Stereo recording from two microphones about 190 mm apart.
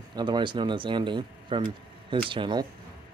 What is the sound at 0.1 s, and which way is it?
A man's voice, 20° right (ahead or behind).